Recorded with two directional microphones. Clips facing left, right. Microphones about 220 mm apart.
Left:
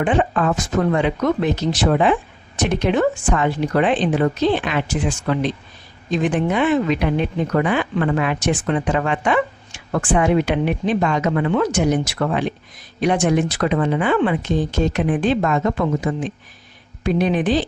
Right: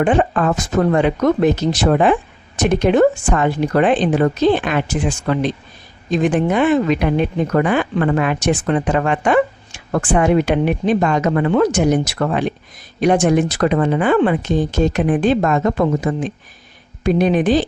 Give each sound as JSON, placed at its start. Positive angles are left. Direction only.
{"t": 0.0, "sound": "speech", "side_deg": -45}